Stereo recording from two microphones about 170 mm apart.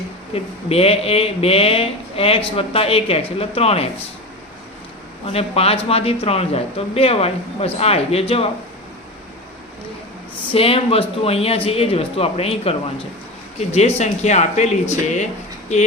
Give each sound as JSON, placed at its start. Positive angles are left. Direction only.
{"t": 0.3, "sound": "speech", "side_deg": 35}
{"t": 5.2, "sound": "speech", "side_deg": 35}
{"t": 10.5, "sound": "speech", "side_deg": 35}